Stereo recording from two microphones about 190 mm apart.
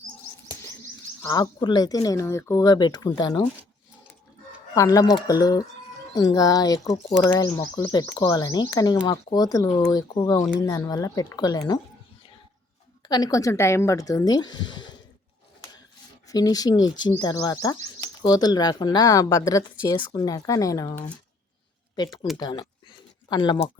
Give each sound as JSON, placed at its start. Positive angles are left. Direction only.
{"t": 1.2, "sound": "speech", "side_deg": 20}
{"t": 4.7, "sound": "speech", "side_deg": 15}
{"t": 13.1, "sound": "speech", "side_deg": 20}
{"t": 16.3, "sound": "speech", "side_deg": 20}